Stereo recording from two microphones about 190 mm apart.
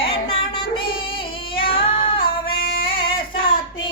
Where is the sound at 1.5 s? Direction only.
25° left (ahead or behind).